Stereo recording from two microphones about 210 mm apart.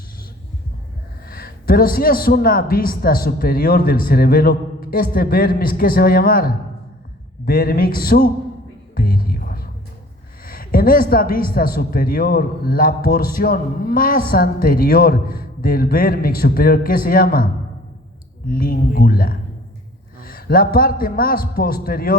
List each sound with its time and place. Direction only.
1.3 s a man's voice: 45° left (ahead or behind)
9.0 s music: 45° left (ahead or behind)
10.4 s a man's voice: 45° left (ahead or behind)
18.4 s a man's voice: 45° left (ahead or behind)